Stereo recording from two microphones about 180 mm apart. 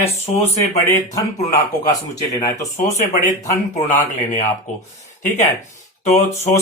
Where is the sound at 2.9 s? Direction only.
40° left (ahead or behind).